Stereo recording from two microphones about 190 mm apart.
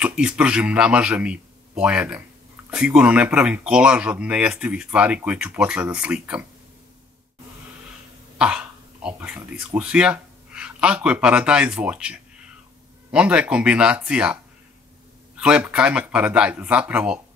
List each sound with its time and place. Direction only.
0.0 s a man's voice: 5° right (ahead or behind)
8.4 s speech: 5° right (ahead or behind)